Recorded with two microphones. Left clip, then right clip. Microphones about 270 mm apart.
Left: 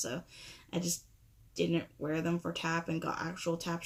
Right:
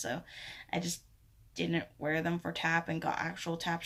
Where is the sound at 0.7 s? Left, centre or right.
Centre.